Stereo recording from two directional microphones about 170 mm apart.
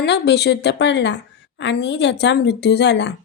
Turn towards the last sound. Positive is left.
turn(degrees=90)